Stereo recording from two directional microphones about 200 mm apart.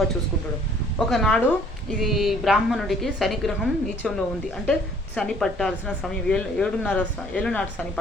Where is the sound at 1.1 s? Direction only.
Centre (ahead or behind).